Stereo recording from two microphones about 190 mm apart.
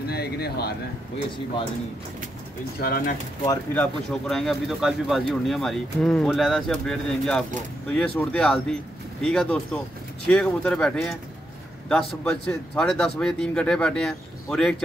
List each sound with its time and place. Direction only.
0.1 s speech: 55° left (ahead or behind)
2.8 s speech: 50° left (ahead or behind)
3.4 s speech: 10° left (ahead or behind)